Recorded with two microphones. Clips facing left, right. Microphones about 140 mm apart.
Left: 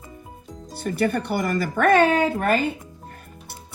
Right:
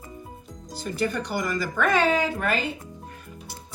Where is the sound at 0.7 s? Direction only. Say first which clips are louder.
Left 4 dB; 60° left (ahead or behind).